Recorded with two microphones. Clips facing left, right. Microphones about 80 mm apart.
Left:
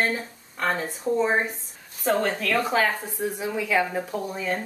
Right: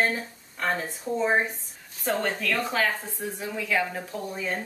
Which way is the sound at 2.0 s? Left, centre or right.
Centre.